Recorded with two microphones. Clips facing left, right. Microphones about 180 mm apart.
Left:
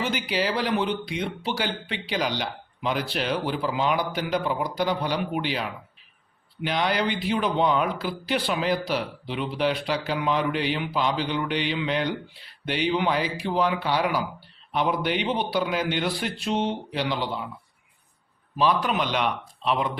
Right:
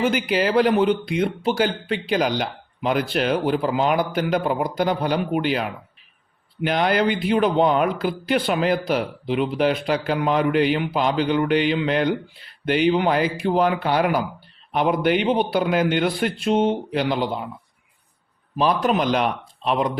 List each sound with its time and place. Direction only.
0.0 s speech: 50° right (ahead or behind)
18.5 s speech: 45° right (ahead or behind)